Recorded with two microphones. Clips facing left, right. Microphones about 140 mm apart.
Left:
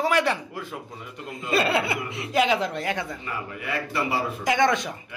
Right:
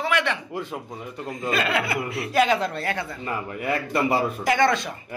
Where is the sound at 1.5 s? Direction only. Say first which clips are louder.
Left 2 dB; 30° left (ahead or behind); by 3.1 s 15° left (ahead or behind).